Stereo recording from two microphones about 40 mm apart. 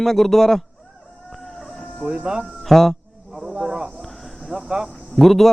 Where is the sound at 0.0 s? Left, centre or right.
Centre.